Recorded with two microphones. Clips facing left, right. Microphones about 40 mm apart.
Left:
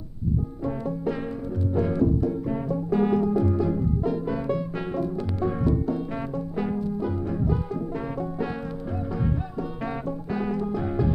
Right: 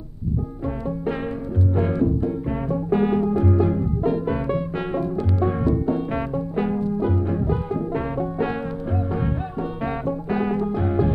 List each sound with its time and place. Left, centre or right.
1.8 s music: right
10.6 s music: right